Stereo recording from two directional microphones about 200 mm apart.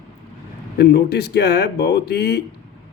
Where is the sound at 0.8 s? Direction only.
55° left (ahead or behind).